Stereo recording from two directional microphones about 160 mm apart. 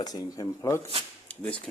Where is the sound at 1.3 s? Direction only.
10° left (ahead or behind).